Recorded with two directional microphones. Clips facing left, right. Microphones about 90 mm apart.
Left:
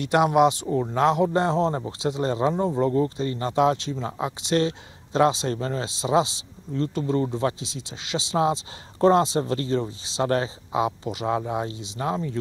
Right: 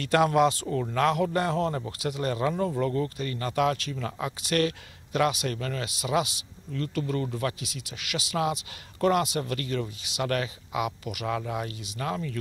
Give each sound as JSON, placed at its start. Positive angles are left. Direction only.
{"t": 0.0, "sound": "a man's voice", "side_deg": 20}